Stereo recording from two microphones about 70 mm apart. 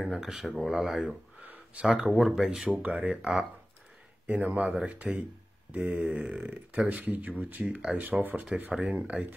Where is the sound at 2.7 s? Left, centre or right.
Centre.